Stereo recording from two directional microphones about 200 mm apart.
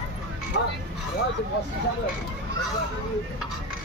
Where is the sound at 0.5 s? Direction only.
65° left (ahead or behind).